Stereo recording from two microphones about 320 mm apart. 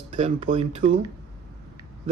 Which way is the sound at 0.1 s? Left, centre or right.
Right.